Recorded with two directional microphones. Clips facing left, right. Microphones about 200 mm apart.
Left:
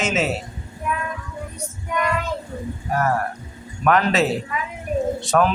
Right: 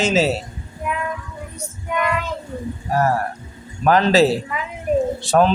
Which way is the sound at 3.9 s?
30° right (ahead or behind).